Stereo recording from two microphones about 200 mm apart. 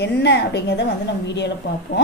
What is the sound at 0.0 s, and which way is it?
Speech, 55° left (ahead or behind).